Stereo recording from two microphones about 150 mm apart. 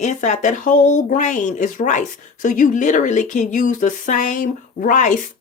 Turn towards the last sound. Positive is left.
turn(degrees=60)  # may be behind; listen again after turning